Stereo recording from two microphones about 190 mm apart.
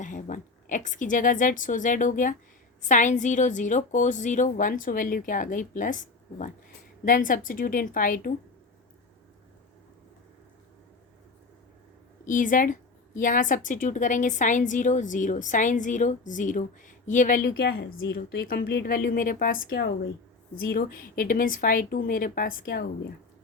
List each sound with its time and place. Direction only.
0.0 s a woman's voice: 45° left (ahead or behind)
12.2 s a woman's voice: 45° left (ahead or behind); by 23.1 s 60° left (ahead or behind)